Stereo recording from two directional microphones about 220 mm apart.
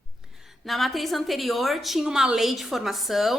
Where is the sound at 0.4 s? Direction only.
Centre (ahead or behind).